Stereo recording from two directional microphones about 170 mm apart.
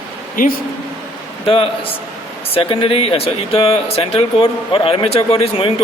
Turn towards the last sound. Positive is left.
turn(degrees=35)  # may be behind; listen again after turning